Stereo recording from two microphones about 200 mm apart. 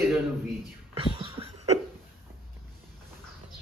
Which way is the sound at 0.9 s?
30° right (ahead or behind).